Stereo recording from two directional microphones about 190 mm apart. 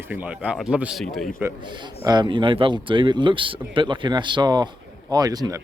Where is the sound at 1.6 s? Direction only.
25° right (ahead or behind).